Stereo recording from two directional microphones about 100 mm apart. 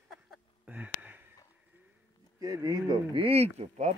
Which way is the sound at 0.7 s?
15° right (ahead or behind).